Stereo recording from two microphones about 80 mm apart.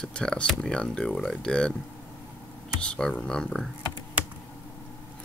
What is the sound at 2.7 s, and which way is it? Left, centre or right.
Speech, centre.